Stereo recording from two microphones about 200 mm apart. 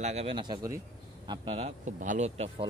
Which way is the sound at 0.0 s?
30° right (ahead or behind).